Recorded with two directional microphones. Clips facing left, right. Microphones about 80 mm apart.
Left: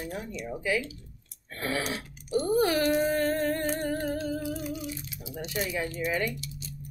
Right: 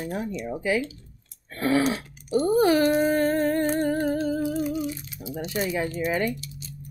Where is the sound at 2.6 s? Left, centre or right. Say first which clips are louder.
Right 5 dB; right.